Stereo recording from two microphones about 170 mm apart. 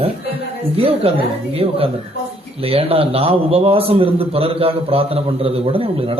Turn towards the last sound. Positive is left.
turn(degrees=-35)  # may be behind; listen again after turning